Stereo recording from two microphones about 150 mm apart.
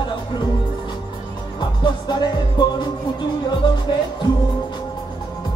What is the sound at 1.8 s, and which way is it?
Music, 30° left (ahead or behind).